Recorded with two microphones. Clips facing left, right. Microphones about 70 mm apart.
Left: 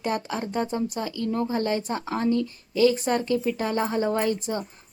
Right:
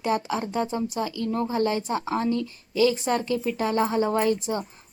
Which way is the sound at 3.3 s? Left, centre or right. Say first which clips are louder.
Right 1 dB; centre.